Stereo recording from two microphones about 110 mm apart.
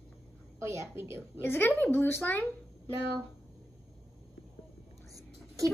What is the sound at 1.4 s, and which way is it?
A woman's voice, 20° left (ahead or behind).